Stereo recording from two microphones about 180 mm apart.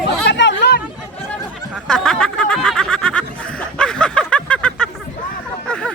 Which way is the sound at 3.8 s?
5° left (ahead or behind).